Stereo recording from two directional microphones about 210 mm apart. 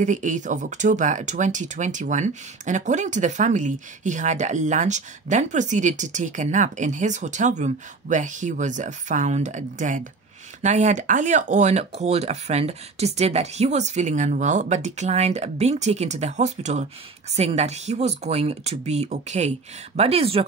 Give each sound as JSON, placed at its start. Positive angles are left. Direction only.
{"t": 0.0, "sound": "speech", "side_deg": -35}